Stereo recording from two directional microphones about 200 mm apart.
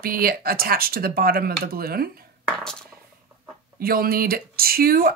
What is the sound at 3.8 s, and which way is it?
A woman's voice, 45° right (ahead or behind).